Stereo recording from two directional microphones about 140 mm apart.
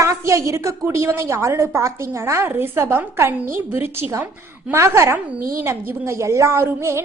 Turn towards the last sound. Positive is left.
turn(degrees=-20)  # may be behind; listen again after turning